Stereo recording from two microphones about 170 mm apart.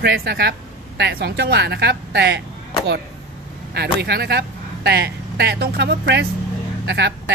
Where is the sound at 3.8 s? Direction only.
70° right (ahead or behind).